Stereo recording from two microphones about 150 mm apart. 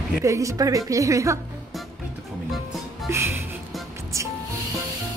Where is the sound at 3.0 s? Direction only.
15° right (ahead or behind).